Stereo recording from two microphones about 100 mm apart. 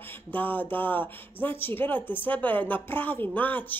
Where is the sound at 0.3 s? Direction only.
20° left (ahead or behind).